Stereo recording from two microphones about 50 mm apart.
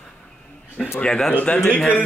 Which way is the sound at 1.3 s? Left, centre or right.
Left.